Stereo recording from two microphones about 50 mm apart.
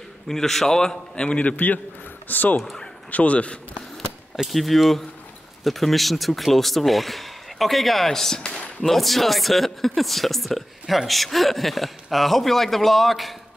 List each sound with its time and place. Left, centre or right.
0.3 s a man's voice: centre
2.2 s speech: left
2.6 s a man's voice: centre
3.1 s speech: left
4.5 s a man's voice: centre
8.8 s a man's voice: centre